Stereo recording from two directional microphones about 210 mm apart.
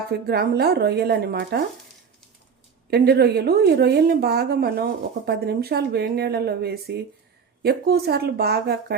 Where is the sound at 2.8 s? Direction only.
50° right (ahead or behind).